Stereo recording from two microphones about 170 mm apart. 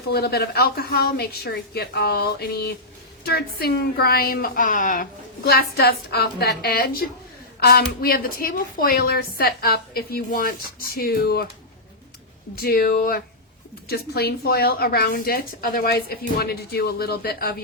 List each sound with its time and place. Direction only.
0.1 s a woman's voice: 70° left (ahead or behind); by 5.0 s 50° left (ahead or behind)
5.5 s a woman's voice: 65° left (ahead or behind)
12.5 s a woman's voice: 60° left (ahead or behind)